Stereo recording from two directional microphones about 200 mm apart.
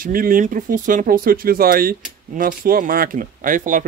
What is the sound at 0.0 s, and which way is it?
Speech, 45° right (ahead or behind).